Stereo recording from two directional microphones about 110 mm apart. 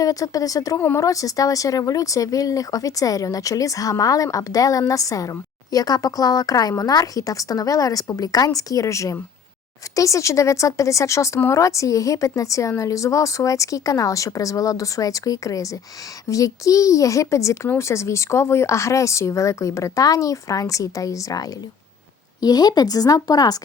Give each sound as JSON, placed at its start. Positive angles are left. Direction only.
{"t": 0.0, "sound": "speech", "side_deg": 30}